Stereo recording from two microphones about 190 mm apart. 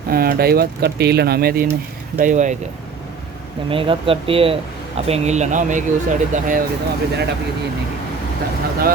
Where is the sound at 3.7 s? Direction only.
30° right (ahead or behind).